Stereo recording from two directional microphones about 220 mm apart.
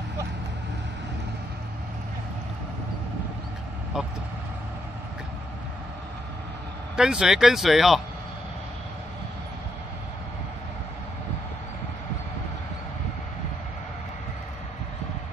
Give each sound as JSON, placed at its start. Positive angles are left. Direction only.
{"t": 7.0, "sound": "speech", "side_deg": -5}